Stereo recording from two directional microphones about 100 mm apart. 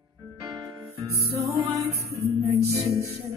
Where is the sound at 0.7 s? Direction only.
30° right (ahead or behind).